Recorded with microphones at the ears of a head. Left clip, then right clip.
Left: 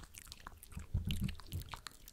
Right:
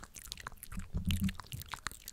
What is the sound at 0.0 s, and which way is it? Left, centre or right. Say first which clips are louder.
Biting: right 7 dB; right.